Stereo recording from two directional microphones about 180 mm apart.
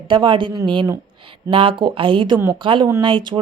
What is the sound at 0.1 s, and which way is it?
Speech, 25° right (ahead or behind).